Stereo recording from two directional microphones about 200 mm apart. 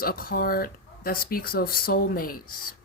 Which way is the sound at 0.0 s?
50° left (ahead or behind).